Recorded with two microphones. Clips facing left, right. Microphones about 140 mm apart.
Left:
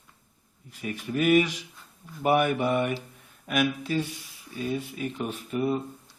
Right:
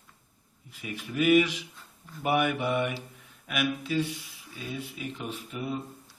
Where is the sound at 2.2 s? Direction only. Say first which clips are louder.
Left 3 dB; 40° left (ahead or behind).